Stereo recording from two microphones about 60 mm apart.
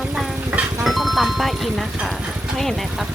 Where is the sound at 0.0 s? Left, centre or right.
Centre.